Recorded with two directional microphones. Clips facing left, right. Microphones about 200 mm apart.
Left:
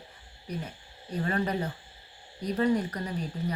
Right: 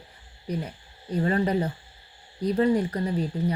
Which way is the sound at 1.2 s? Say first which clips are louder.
Right 5 dB; 30° right (ahead or behind).